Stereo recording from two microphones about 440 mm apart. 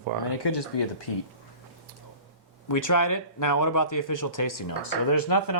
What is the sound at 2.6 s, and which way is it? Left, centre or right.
Speech, left.